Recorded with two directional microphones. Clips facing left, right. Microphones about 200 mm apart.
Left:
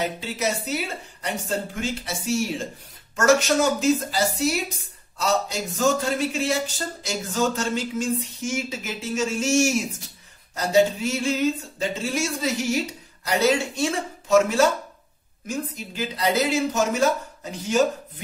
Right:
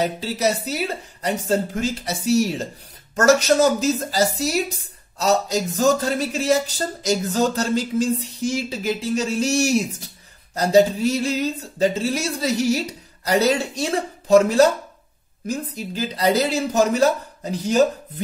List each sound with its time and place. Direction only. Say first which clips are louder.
0.0 s speech: right 5 dB; 35° right (ahead or behind)